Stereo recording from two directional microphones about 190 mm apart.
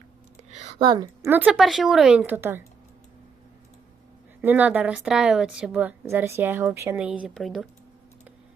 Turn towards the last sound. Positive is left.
turn(degrees=0)  # may be behind; listen again after turning